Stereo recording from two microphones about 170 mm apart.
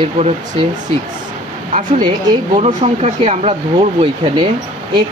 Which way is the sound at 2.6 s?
40° right (ahead or behind).